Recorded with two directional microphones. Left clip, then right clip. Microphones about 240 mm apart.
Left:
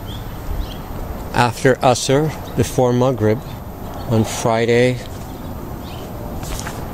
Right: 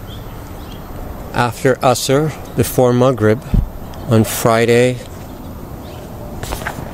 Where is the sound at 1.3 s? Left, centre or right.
Centre.